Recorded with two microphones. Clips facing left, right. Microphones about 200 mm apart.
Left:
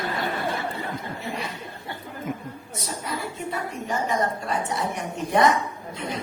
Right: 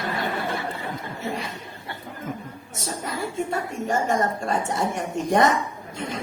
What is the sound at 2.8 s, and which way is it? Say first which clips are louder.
A woman's voice: right 2 dB; 45° right (ahead or behind).